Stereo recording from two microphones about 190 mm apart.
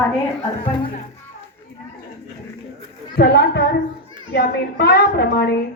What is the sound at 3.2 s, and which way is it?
A woman's voice, 55° left (ahead or behind).